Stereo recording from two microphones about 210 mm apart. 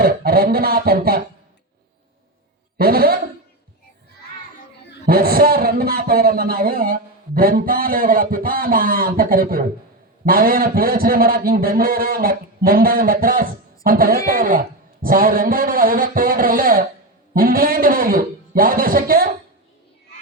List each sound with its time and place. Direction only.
0.0 s a man's voice: 45° right (ahead or behind)
2.7 s speech: 45° right (ahead or behind)
5.0 s a man's voice: 45° right (ahead or behind)